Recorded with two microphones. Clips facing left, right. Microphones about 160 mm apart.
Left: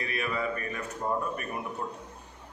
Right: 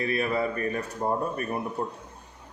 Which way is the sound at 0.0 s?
35° right (ahead or behind).